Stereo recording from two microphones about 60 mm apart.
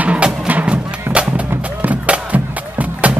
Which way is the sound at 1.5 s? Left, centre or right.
Right.